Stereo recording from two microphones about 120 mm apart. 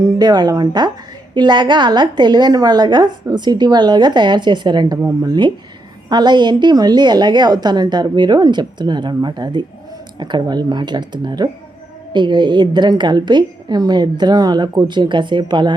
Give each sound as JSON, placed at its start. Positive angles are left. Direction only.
{"t": 0.0, "sound": "a woman's voice", "side_deg": -35}